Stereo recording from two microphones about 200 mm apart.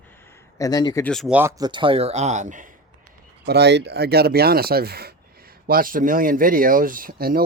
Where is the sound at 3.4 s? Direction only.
55° right (ahead or behind).